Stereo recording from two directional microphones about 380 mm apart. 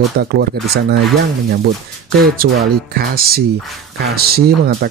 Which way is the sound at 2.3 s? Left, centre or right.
Right.